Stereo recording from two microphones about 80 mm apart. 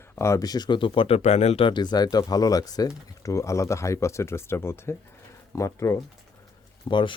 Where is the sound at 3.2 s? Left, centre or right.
Left.